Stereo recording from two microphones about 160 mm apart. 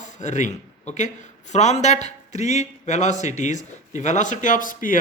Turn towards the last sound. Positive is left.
turn(degrees=55)  # may be behind; listen again after turning